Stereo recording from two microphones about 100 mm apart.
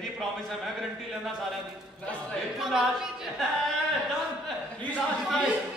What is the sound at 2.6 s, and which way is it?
Speech, 5° right (ahead or behind).